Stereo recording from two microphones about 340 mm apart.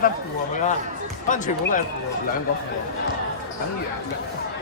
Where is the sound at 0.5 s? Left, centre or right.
Left.